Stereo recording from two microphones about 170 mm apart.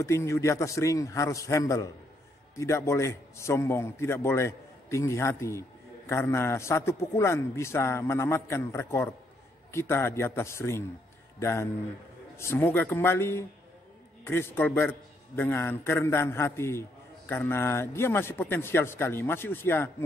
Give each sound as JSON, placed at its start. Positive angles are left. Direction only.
{"t": 0.0, "sound": "a man's voice", "side_deg": 15}